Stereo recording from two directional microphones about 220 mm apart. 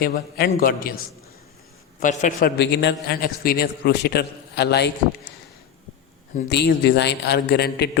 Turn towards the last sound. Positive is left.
turn(degrees=50)  # may be behind; listen again after turning